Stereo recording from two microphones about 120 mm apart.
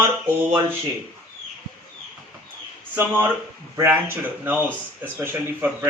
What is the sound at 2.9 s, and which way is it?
Speech, 15° right (ahead or behind).